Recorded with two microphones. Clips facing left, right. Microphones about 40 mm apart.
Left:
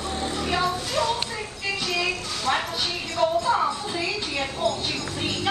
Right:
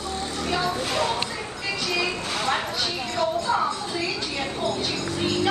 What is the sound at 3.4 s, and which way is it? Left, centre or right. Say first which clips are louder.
Music: left 1 dB; centre.